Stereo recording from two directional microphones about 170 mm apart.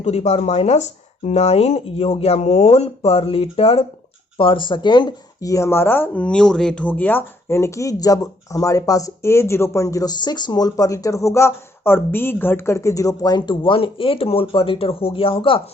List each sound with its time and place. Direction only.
0.0 s speech: 40° left (ahead or behind)